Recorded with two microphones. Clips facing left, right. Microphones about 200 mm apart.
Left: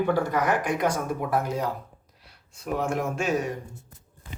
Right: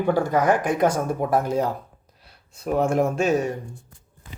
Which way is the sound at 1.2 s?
30° right (ahead or behind).